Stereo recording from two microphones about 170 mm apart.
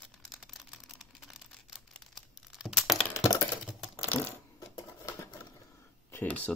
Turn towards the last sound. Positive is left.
turn(degrees=10)  # may be behind; listen again after turning